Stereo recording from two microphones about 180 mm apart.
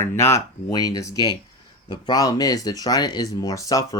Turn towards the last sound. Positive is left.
turn(degrees=20)  # may be behind; listen again after turning